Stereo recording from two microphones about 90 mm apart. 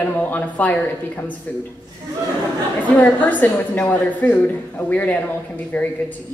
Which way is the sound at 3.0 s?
20° left (ahead or behind).